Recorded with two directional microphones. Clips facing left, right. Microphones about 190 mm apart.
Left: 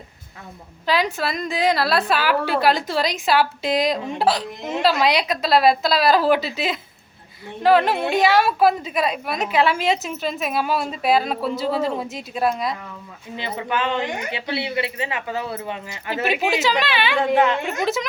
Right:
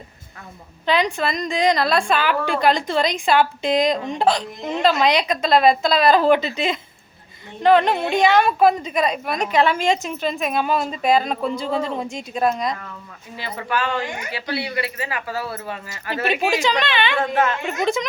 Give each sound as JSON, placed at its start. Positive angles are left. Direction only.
{"t": 0.9, "sound": "a woman's voice", "side_deg": 5}
{"t": 13.3, "sound": "speech", "side_deg": 20}
{"t": 16.0, "sound": "a woman's voice", "side_deg": 5}
{"t": 17.2, "sound": "a child's voice", "side_deg": 15}